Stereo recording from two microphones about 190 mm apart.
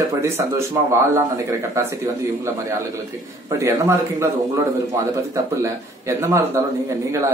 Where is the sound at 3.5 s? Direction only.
15° right (ahead or behind).